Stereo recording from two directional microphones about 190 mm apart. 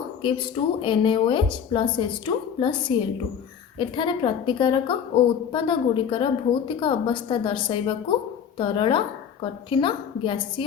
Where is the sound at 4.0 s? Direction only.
25° left (ahead or behind).